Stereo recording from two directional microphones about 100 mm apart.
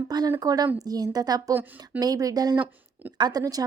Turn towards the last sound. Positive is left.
turn(degrees=-40)  # may be behind; listen again after turning